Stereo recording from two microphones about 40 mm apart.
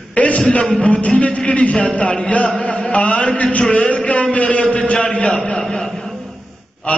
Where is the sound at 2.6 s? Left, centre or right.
Left.